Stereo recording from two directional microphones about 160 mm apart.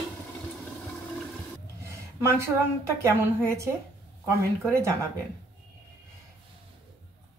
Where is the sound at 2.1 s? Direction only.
20° right (ahead or behind).